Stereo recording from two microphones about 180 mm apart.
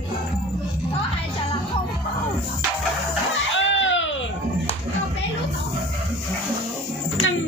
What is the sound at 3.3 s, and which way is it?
Music, 90° left.